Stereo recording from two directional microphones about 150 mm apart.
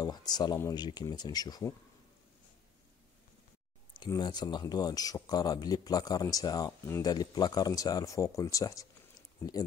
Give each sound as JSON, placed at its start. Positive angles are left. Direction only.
{"t": 0.0, "sound": "speech", "side_deg": 25}
{"t": 4.1, "sound": "speech", "side_deg": 30}